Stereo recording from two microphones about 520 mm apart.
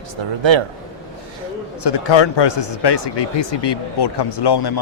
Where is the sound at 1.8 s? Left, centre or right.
Left.